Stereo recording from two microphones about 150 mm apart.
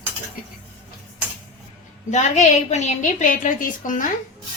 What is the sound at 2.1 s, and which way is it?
A woman's voice, 50° left (ahead or behind).